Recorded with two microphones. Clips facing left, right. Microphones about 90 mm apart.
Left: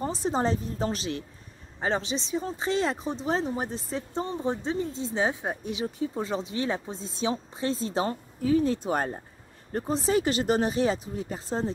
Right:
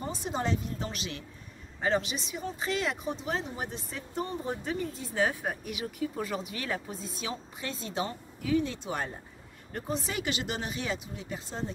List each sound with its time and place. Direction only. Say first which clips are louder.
0.0 s speech: left 6 dB; 35° left (ahead or behind)